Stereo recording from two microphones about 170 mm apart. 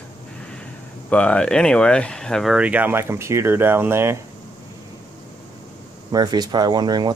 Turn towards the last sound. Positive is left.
turn(degrees=-25)  # may be behind; listen again after turning